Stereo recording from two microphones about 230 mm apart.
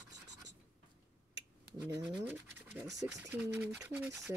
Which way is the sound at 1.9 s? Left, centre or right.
Centre.